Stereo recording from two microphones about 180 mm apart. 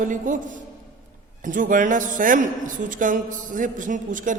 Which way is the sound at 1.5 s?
45° right (ahead or behind).